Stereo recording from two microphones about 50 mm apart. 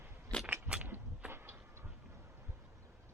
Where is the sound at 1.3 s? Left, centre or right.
Right.